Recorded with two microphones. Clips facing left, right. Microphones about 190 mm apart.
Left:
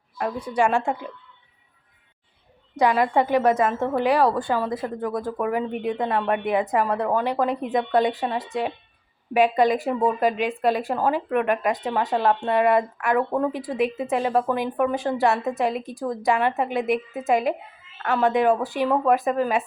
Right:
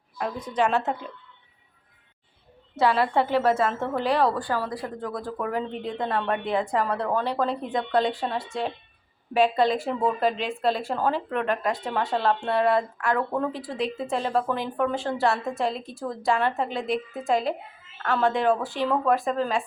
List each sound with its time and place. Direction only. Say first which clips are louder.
0.2 s speech: left 3 dB; 10° left (ahead or behind)
2.7 s speech: left 2 dB; 15° left (ahead or behind)